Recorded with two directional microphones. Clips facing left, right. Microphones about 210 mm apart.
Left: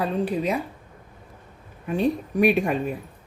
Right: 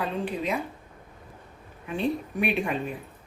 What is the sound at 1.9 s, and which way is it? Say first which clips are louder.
Speech: left 5 dB; 45° left (ahead or behind).